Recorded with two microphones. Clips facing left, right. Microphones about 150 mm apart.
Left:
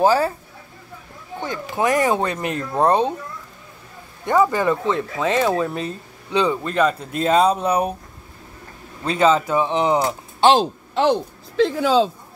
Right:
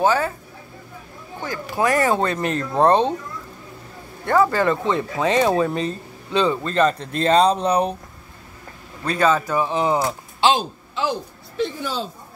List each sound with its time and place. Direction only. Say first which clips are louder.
0.0 s speech: left 2 dB; 35° left (ahead or behind)
1.4 s speech: even; 20° left (ahead or behind)
4.3 s speech: even; 15° left (ahead or behind)
5.2 s speech: right 2 dB; centre (ahead or behind)
9.0 s speech: left 2 dB; 20° left (ahead or behind)
10.5 s speech: left 5 dB; 75° left (ahead or behind); by 12.1 s 90° left